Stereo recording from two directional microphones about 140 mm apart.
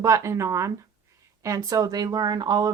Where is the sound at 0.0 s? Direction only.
20° right (ahead or behind).